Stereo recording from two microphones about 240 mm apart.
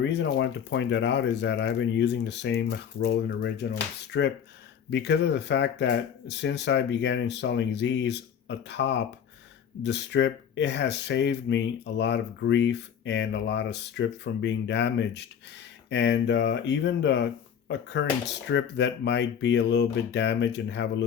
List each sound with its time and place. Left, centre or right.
0.0 s speech: left